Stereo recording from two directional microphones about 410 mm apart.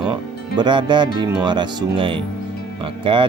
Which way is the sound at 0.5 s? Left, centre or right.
Centre.